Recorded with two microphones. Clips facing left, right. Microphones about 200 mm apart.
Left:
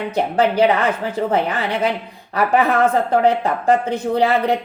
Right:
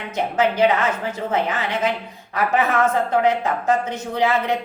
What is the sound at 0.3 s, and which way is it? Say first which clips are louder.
Speech: left 2 dB; 35° left (ahead or behind).